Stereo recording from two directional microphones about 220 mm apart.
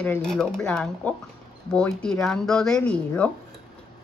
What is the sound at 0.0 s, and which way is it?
A woman's voice, 5° left (ahead or behind).